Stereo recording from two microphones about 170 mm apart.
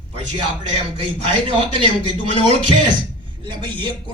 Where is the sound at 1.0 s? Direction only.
35° right (ahead or behind).